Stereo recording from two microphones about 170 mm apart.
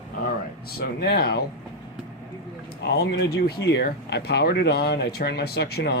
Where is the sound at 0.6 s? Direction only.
65° left (ahead or behind).